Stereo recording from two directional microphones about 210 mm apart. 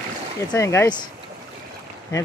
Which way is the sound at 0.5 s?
10° left (ahead or behind).